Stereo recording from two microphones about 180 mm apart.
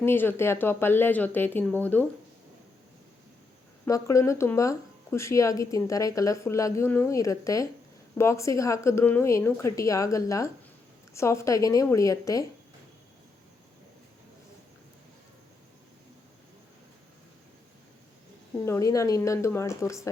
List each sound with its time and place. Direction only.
0.0 s speech: 10° left (ahead or behind)
3.8 s speech: 15° left (ahead or behind)
18.6 s speech: 15° left (ahead or behind)